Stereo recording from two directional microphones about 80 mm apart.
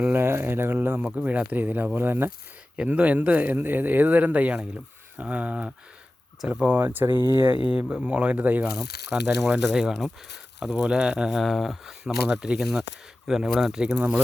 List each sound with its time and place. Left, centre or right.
0.1 s speech: right
2.7 s speech: centre
6.7 s speech: right
7.7 s speech: centre
9.0 s speech: centre
13.9 s speech: centre